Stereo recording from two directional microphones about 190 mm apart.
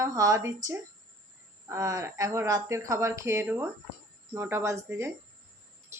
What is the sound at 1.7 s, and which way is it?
Speech, 15° right (ahead or behind).